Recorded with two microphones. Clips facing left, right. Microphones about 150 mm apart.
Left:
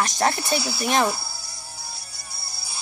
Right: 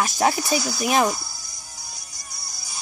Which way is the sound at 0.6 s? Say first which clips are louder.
Right 2 dB; 5° left (ahead or behind).